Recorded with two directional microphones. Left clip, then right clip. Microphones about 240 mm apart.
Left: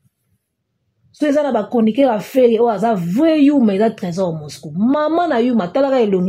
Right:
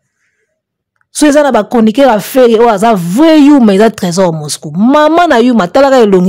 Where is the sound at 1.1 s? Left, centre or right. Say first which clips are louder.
Right 9 dB; right.